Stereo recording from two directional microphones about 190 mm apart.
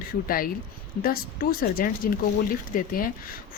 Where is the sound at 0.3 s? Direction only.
50° left (ahead or behind).